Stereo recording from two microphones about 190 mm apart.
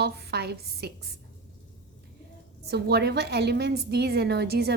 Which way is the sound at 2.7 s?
60° right (ahead or behind).